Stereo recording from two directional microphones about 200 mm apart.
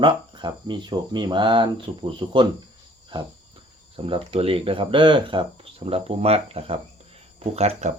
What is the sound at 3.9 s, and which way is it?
Speech, 25° right (ahead or behind).